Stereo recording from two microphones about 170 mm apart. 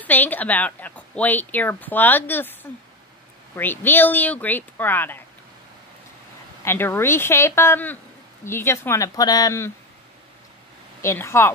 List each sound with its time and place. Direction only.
0.0 s speech: 10° left (ahead or behind)
3.5 s speech: 10° left (ahead or behind)
6.6 s speech: 15° left (ahead or behind)
11.0 s speech: 15° left (ahead or behind)